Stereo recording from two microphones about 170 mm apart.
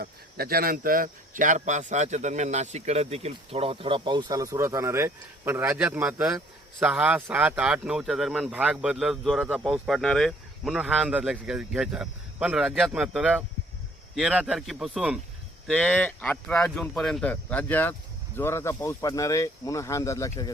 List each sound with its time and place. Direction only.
0.0 s a man's voice: 60° right (ahead or behind); by 20.5 s 20° left (ahead or behind)